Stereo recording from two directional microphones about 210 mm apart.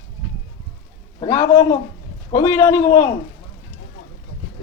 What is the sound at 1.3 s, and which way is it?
A man's voice, 15° left (ahead or behind).